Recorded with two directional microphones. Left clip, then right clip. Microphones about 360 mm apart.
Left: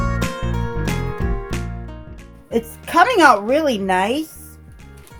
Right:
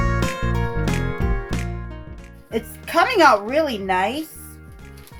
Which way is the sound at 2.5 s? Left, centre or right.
Left.